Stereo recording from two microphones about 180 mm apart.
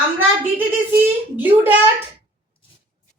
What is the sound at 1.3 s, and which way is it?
Speech, 10° right (ahead or behind).